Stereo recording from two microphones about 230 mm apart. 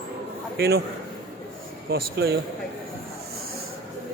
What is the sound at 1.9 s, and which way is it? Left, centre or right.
Speech, right.